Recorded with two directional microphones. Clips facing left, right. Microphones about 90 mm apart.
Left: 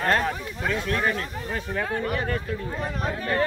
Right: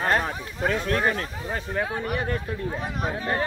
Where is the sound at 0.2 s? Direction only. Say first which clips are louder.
Even; 35° right (ahead or behind).